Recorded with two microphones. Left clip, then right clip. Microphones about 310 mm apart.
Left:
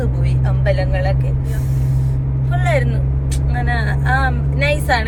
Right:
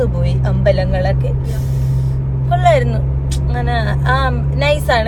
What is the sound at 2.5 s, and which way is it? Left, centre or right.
Vehicle, centre.